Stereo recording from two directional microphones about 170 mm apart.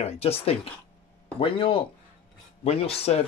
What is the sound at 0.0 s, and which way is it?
Speech, 35° left (ahead or behind).